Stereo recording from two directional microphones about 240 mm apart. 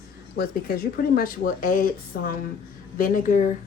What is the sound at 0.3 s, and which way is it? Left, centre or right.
A woman's voice, left.